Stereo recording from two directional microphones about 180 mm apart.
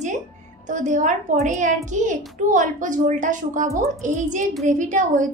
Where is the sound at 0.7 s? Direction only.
45° right (ahead or behind).